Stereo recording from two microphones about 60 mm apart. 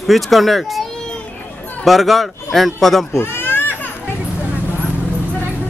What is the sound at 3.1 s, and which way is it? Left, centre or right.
Children playing, left.